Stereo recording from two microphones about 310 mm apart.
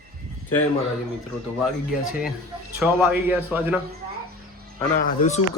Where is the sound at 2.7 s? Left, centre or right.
Centre.